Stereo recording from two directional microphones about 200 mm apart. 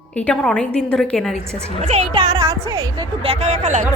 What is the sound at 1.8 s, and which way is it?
A woman's voice, 25° right (ahead or behind).